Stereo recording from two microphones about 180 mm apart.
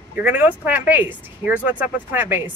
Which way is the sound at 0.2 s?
10° right (ahead or behind).